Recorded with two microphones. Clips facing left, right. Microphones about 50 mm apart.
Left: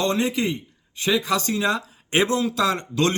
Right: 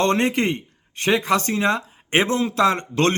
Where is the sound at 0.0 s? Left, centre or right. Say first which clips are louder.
Right 3 dB; right.